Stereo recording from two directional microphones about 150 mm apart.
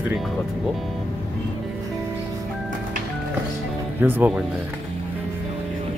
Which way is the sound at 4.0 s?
15° right (ahead or behind).